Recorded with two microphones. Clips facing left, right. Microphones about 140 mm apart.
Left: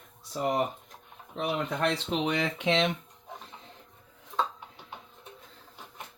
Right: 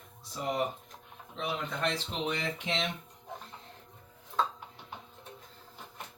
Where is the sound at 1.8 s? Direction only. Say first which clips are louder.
Left 4 dB; 90° left.